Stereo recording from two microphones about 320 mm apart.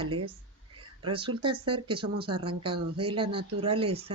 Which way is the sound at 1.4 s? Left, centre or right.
Centre.